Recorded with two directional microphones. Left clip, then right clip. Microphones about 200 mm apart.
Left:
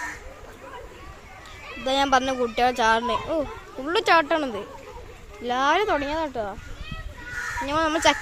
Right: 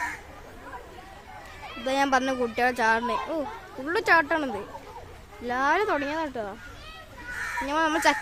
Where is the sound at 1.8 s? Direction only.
Centre (ahead or behind).